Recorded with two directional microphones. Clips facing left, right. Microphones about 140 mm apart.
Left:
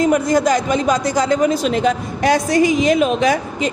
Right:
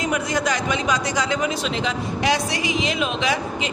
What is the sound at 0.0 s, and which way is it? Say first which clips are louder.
Speech: left 8 dB; 45° left (ahead or behind).